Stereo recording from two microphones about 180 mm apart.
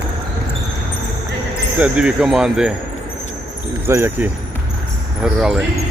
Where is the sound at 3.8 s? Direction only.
15° right (ahead or behind).